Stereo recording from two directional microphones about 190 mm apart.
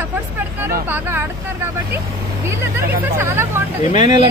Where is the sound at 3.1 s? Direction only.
10° right (ahead or behind).